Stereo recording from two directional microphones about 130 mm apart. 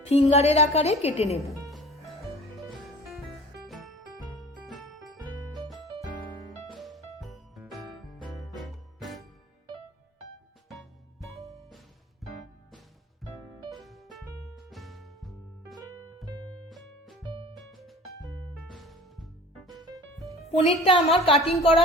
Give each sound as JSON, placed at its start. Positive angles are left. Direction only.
{"t": 0.1, "sound": "a woman's voice", "side_deg": 55}
{"t": 1.7, "sound": "music", "side_deg": 0}
{"t": 3.7, "sound": "music", "side_deg": 0}
{"t": 12.2, "sound": "music", "side_deg": 0}
{"t": 13.8, "sound": "music", "side_deg": 0}
{"t": 18.6, "sound": "music", "side_deg": 0}
{"t": 20.5, "sound": "a woman's voice", "side_deg": 40}